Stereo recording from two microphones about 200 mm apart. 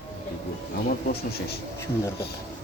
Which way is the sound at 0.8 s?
50° left (ahead or behind).